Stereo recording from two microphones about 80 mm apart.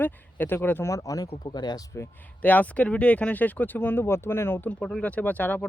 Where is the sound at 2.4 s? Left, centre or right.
Left.